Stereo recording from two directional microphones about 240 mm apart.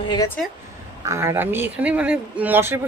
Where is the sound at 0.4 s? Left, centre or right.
Centre.